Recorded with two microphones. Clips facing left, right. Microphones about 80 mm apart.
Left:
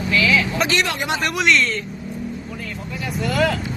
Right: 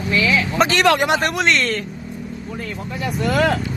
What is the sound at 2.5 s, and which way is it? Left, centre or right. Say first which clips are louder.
Vehicle: right 2 dB; right.